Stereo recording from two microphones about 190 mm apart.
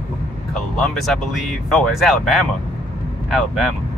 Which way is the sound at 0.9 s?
Centre (ahead or behind).